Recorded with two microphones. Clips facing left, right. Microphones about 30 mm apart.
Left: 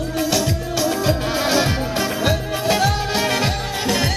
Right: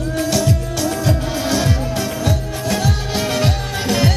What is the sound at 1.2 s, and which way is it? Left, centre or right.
Music, left.